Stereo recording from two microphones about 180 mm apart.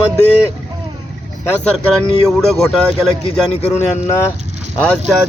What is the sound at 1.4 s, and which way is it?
Speech, 5° left (ahead or behind).